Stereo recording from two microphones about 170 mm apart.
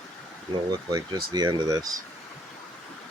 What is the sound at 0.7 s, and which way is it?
Speech, 25° right (ahead or behind).